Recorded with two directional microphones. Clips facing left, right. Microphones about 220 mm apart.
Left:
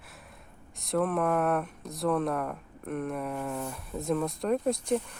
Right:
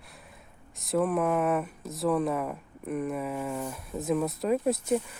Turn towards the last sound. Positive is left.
turn(degrees=-5)  # may be behind; listen again after turning